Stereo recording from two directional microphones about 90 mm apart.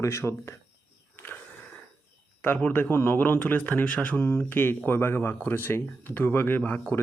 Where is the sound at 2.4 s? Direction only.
20° left (ahead or behind).